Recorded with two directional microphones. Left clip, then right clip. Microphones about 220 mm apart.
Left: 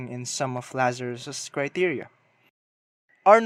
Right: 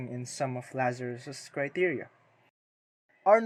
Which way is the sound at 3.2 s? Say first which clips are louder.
Left 6 dB; 15° left (ahead or behind).